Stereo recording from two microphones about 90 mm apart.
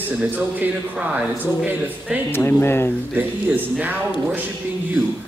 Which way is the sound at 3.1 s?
20° right (ahead or behind).